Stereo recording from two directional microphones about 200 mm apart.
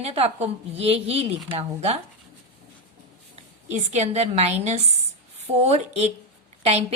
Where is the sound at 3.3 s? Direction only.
35° right (ahead or behind).